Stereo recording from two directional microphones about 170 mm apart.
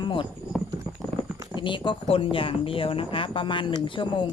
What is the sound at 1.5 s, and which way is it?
Speech, 30° left (ahead or behind).